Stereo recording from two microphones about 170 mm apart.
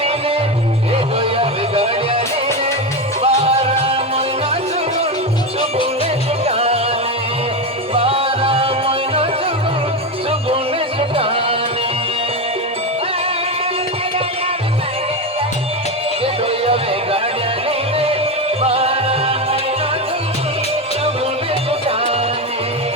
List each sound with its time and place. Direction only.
1.2 s music: 35° right (ahead or behind)
3.2 s music: 35° right (ahead or behind)
6.4 s music: 35° right (ahead or behind)
7.9 s music: 35° right (ahead or behind)
16.2 s music: 35° right (ahead or behind)
18.6 s music: 35° right (ahead or behind)